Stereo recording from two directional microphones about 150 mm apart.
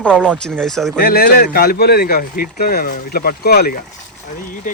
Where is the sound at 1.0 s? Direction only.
85° left.